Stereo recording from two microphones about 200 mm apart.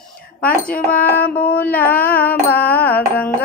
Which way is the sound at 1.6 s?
10° left (ahead or behind).